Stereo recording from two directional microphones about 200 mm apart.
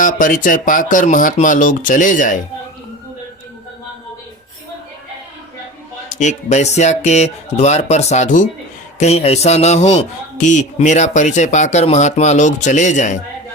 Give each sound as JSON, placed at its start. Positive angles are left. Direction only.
{"t": 0.0, "sound": "a man's voice", "side_deg": 40}
{"t": 6.1, "sound": "a man's voice", "side_deg": 35}